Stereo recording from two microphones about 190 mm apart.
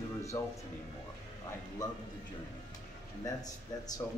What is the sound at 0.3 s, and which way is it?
Speech, 15° left (ahead or behind).